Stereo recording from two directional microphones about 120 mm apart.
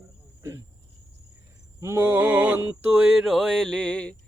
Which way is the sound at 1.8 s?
20° right (ahead or behind).